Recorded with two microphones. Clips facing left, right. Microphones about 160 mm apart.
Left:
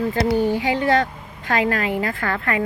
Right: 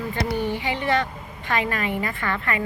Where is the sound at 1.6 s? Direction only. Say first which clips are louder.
Left 5 dB; 90° left.